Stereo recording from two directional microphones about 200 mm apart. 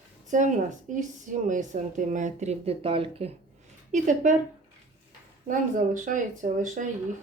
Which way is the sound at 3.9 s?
40° right (ahead or behind).